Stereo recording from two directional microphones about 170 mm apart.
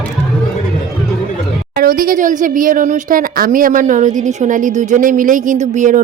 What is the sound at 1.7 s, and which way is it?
Speech, 55° right (ahead or behind).